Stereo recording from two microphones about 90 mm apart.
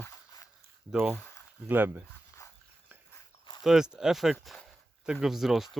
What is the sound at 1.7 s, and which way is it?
Speech, 25° right (ahead or behind).